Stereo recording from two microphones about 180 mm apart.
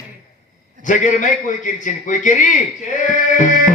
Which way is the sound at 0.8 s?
45° left (ahead or behind).